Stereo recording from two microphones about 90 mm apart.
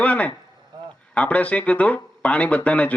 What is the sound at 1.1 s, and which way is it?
A man's voice, 15° left (ahead or behind).